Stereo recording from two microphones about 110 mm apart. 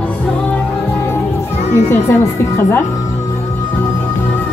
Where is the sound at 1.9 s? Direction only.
25° left (ahead or behind).